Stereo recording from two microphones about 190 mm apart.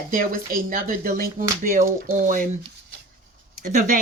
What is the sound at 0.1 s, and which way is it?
Speech, 50° right (ahead or behind).